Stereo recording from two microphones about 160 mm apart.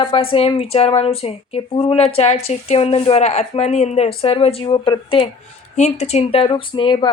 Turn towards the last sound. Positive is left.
turn(degrees=30)  # may be behind; listen again after turning